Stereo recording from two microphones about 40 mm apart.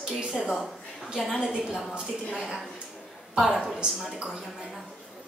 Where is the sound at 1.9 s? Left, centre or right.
Centre.